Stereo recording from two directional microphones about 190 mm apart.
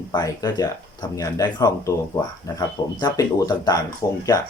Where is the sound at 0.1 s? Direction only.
20° left (ahead or behind).